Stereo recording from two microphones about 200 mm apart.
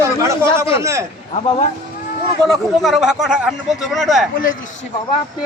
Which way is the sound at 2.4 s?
Centre (ahead or behind).